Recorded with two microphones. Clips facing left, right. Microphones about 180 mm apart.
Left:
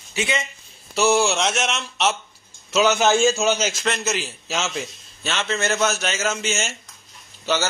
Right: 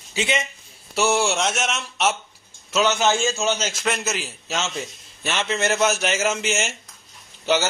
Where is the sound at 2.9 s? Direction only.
10° left (ahead or behind).